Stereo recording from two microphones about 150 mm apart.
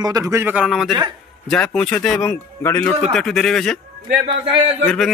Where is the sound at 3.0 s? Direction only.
Centre (ahead or behind).